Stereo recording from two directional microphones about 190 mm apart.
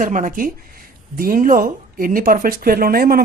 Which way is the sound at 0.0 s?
45° right (ahead or behind).